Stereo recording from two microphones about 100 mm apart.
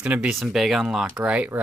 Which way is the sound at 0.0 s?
15° right (ahead or behind).